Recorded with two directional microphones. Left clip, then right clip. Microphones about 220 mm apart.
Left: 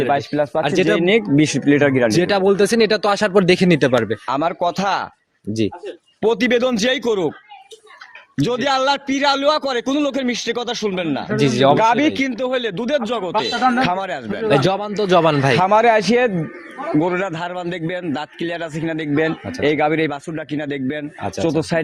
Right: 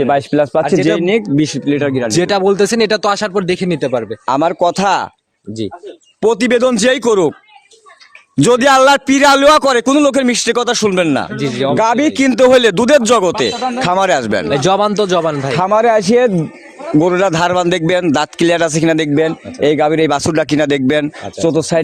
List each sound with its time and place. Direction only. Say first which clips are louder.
0.0 s a man's voice: right 5 dB; 40° right (ahead or behind)
0.9 s speech: right 2 dB; 20° right (ahead or behind)
1.2 s speech: right 1 dB; 10° right (ahead or behind)
2.1 s speech: right 3 dB; 25° right (ahead or behind)
3.3 s speech: left 2 dB; 15° left (ahead or behind)
4.3 s a man's voice: right 10 dB; 45° right (ahead or behind)
6.1 s a man's voice: right 5 dB; 45° right (ahead or behind)
8.4 s a man's voice: right 10 dB; 55° right (ahead or behind)
11.3 s speech: left 2 dB; 15° left (ahead or behind)
11.8 s a man's voice: right 3 dB; 45° right (ahead or behind)
14.8 s a man's voice: right 10 dB; 45° right (ahead or behind)
15.2 s speech: left 1 dB; 20° left (ahead or behind)
15.5 s a man's voice: right 4 dB; 30° right (ahead or behind); by 21.1 s 50° right (ahead or behind)
21.3 s a man's voice: right 6 dB; 35° right (ahead or behind)